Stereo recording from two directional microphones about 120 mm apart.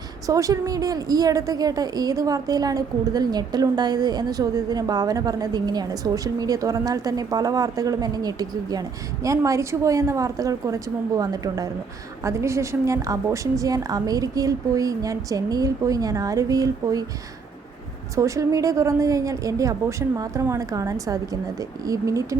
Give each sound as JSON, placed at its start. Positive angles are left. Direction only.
{"t": 0.3, "sound": "a woman's voice", "side_deg": -30}
{"t": 18.1, "sound": "a woman's voice", "side_deg": -25}